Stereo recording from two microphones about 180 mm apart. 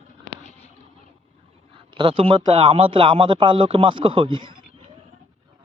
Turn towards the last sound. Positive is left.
turn(degrees=-25)  # may be behind; listen again after turning